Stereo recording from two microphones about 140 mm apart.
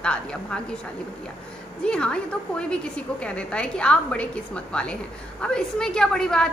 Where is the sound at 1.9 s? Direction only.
5° left (ahead or behind).